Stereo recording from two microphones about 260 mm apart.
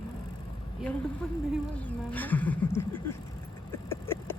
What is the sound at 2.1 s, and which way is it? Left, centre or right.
Speech, centre.